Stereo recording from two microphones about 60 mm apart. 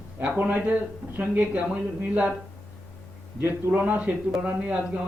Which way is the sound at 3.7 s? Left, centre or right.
Right.